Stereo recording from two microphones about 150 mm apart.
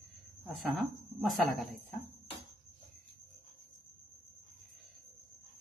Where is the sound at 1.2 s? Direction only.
Centre (ahead or behind).